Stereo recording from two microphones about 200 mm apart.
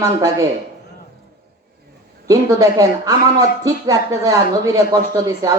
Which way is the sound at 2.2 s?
15° right (ahead or behind).